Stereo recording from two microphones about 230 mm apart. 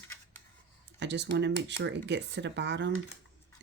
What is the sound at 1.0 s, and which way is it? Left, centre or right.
Speech, right.